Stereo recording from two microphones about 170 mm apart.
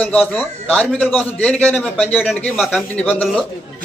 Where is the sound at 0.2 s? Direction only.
5° left (ahead or behind).